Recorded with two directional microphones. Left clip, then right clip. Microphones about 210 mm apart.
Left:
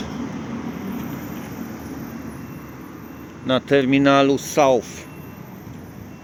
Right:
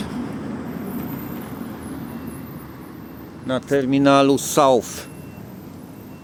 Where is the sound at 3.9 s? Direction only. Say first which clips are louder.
Right 3 dB; centre (ahead or behind); by 4.8 s 20° right (ahead or behind).